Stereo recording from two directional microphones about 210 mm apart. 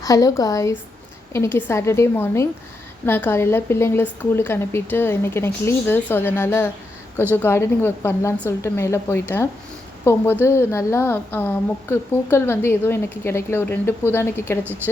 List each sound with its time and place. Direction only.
0.0 s a woman's voice: 15° left (ahead or behind)